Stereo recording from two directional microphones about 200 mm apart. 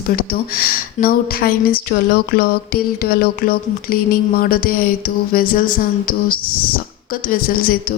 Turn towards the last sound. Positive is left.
turn(degrees=45)  # may be behind; listen again after turning